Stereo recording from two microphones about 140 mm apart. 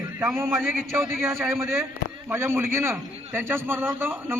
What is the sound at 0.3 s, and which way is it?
A man's voice, 15° right (ahead or behind).